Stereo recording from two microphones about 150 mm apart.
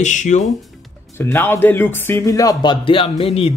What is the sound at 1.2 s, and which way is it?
Speech, 15° left (ahead or behind).